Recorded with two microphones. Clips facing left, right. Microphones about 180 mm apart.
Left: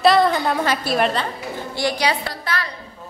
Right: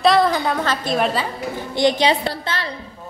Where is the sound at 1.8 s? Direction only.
20° right (ahead or behind).